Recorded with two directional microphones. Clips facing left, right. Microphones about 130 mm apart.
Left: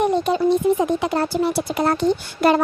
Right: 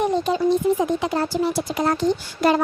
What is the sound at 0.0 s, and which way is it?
Speech, 60° left (ahead or behind).